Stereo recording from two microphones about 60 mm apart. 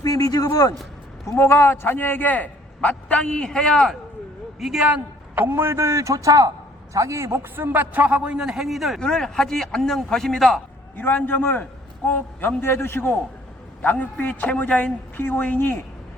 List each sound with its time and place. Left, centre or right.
0.0 s a man's voice: left
1.3 s a man's voice: left; by 3.9 s centre
4.6 s a man's voice: centre
5.3 s a man's voice: right
5.7 s a man's voice: right
6.9 s a man's voice: right
7.5 s a man's voice: right; by 9.0 s centre
9.0 s speech: centre
10.9 s a man's voice: left
13.8 s a man's voice: left